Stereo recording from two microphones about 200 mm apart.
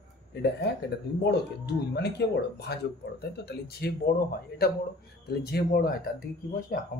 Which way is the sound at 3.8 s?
55° left (ahead or behind).